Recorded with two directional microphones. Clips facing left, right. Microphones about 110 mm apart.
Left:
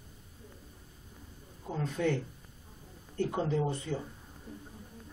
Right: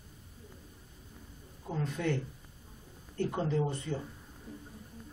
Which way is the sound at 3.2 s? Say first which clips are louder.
Left 1 dB; 15° left (ahead or behind).